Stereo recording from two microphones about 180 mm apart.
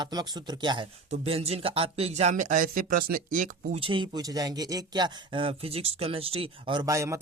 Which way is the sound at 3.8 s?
30° right (ahead or behind).